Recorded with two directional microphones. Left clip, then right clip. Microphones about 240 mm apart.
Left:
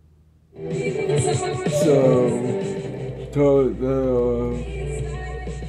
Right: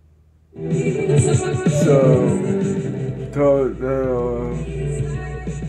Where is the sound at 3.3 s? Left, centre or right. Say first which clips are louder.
Right 1 dB; centre.